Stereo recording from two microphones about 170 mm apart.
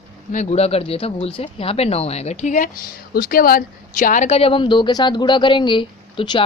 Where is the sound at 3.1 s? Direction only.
60° left (ahead or behind).